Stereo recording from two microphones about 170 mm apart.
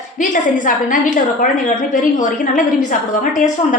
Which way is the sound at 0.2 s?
50° left (ahead or behind).